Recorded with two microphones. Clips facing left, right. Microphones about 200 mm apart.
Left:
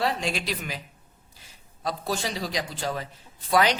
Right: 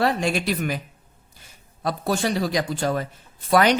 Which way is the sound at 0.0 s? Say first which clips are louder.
Right 6 dB; 55° right (ahead or behind).